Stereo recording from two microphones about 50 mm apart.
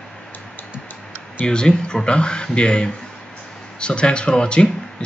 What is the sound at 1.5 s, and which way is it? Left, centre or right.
Speech, centre.